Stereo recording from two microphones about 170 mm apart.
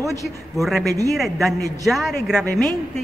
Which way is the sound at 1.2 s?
Centre (ahead or behind).